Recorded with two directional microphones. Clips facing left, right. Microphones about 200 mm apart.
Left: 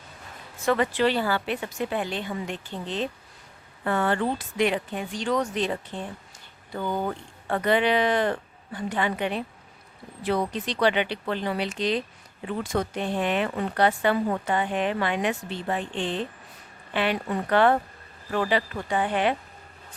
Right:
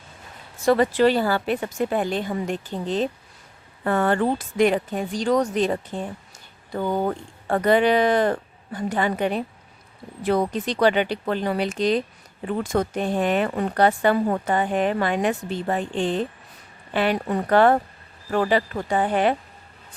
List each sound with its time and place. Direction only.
0.6 s speech: 35° right (ahead or behind)